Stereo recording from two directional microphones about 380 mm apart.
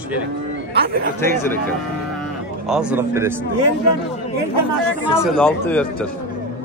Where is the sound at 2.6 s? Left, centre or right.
Centre.